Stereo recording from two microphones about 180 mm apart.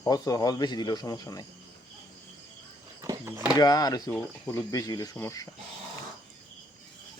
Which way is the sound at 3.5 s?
20° left (ahead or behind).